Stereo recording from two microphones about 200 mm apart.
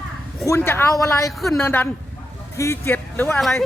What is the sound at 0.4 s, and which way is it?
Speech, 15° left (ahead or behind).